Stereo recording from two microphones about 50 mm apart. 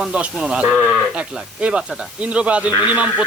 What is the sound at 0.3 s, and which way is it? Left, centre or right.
Speech, right.